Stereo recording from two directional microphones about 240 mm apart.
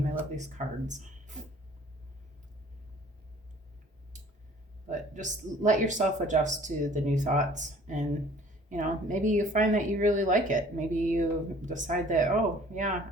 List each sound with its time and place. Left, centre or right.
0.3 s speech: right
4.9 s speech: right